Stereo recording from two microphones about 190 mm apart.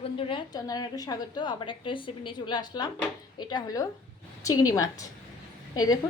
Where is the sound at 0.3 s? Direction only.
25° left (ahead or behind).